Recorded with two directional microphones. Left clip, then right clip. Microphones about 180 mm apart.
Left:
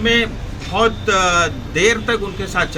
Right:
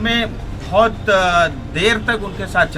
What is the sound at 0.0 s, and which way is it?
A man's voice, 30° right (ahead or behind).